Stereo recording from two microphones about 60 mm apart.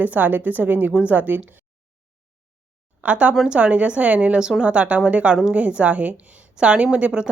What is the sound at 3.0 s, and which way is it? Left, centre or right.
Speech, right.